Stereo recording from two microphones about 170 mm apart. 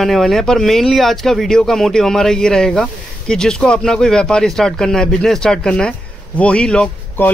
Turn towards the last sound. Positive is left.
turn(degrees=10)  # may be behind; listen again after turning